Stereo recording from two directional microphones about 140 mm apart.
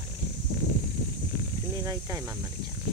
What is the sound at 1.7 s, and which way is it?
Speech, 25° right (ahead or behind).